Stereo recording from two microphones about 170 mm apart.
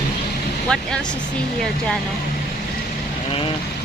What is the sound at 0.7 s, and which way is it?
Speech, 5° left (ahead or behind).